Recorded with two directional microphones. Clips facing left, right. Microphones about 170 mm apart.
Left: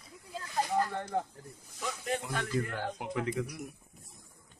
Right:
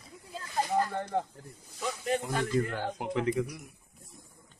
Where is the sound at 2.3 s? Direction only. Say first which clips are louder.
Right 4 dB; 30° right (ahead or behind).